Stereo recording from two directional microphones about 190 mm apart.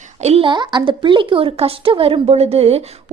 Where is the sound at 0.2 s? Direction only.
30° right (ahead or behind).